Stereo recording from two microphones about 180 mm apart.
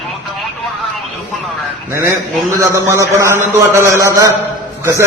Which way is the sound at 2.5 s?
15° right (ahead or behind).